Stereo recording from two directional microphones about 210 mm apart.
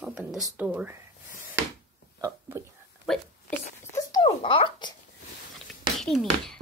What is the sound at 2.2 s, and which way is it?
Whispering, 15° right (ahead or behind).